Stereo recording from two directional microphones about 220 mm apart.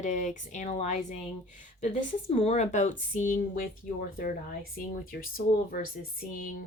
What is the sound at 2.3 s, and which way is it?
Speech, 30° left (ahead or behind).